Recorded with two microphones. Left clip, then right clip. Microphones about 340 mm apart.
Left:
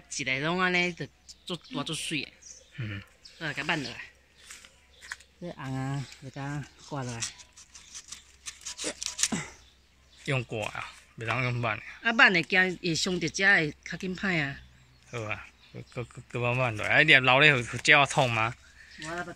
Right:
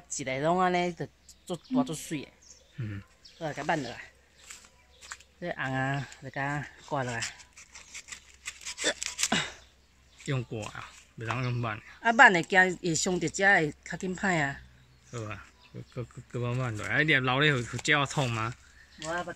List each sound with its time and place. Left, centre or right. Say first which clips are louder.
0.1 s speech: right 1 dB; right
2.7 s bird: left 4 dB; centre
3.3 s speech: even; centre
5.4 s speech: right 8 dB; right
9.0 s a sound: left 1 dB; centre
9.3 s camera: right 7 dB; right
10.2 s speech: left 5 dB; centre
12.0 s speech: right 2 dB; right
15.0 s speech: left 5 dB; centre
18.9 s speech: right 2 dB; right